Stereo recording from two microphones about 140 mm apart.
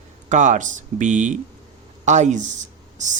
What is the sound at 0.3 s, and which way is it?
Speech, 60° right (ahead or behind).